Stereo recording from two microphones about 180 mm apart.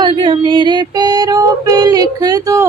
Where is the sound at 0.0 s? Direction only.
25° right (ahead or behind).